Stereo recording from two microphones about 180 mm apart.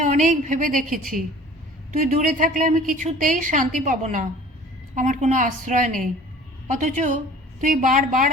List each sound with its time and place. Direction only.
0.0 s a woman's voice: 45° right (ahead or behind)